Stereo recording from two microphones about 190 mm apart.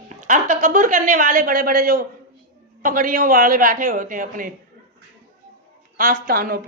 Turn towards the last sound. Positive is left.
turn(degrees=-50)  # may be behind; listen again after turning